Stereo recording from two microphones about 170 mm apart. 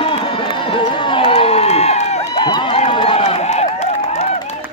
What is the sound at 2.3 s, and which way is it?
Run, 25° left (ahead or behind).